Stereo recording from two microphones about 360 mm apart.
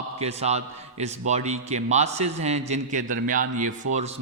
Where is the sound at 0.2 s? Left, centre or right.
Centre.